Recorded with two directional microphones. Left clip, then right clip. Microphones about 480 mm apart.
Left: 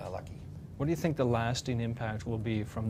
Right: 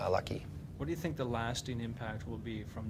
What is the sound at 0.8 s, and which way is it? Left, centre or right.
Speech, left.